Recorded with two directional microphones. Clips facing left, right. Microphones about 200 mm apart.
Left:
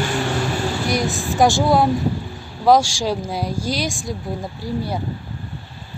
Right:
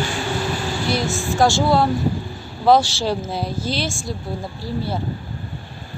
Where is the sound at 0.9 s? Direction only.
15° left (ahead or behind).